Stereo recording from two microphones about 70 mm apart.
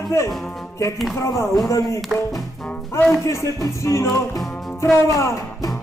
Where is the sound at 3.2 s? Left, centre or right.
Left.